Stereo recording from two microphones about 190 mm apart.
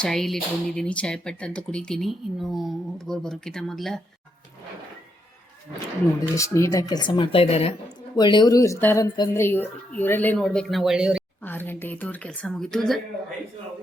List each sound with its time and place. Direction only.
0.0 s speech: centre (ahead or behind)
6.3 s a woman's voice: 15° left (ahead or behind); by 11.2 s 5° right (ahead or behind)
11.4 s a woman's voice: 10° left (ahead or behind)